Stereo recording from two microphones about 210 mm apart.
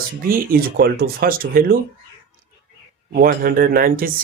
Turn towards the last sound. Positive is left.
turn(degrees=-45)  # may be behind; listen again after turning